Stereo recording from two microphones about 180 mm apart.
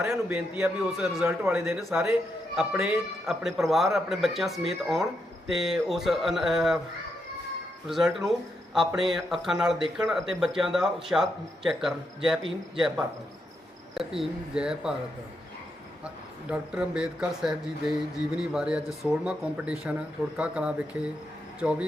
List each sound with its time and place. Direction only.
0.0 s a man's voice: 10° right (ahead or behind)
7.9 s speech: centre (ahead or behind)
12.4 s speech: 30° right (ahead or behind)
13.9 s speech: centre (ahead or behind)
16.5 s a man's voice: 5° right (ahead or behind)